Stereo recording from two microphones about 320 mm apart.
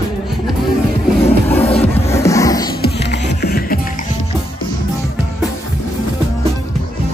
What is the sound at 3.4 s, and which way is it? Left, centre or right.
Music, left.